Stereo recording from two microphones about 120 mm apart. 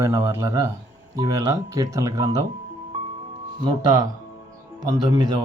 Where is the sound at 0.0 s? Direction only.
25° right (ahead or behind).